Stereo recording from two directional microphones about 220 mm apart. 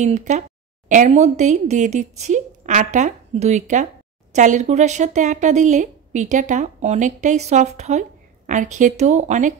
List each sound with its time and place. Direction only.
0.0 s a woman's voice: 30° right (ahead or behind)